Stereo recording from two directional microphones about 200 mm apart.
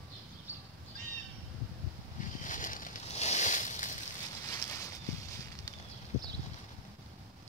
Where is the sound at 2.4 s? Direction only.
40° left (ahead or behind).